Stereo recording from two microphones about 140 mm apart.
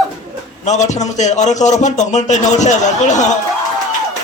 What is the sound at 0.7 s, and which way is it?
A man's voice, 55° left (ahead or behind).